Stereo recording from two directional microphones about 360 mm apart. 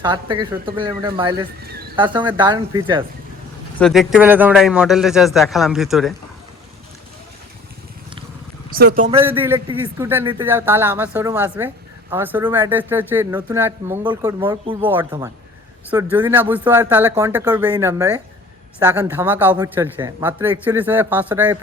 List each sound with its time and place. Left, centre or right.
0.0 s speech: centre
3.8 s a man's voice: centre
8.7 s a man's voice: right
9.2 s a man's voice: centre